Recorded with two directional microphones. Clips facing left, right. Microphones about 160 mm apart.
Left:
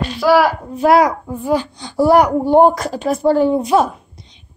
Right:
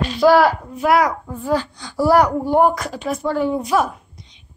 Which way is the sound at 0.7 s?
30° left (ahead or behind).